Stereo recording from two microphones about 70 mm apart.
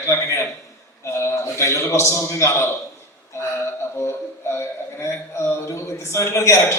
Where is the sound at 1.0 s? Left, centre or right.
Left.